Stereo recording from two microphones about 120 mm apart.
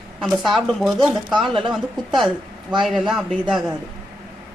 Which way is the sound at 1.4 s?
45° right (ahead or behind).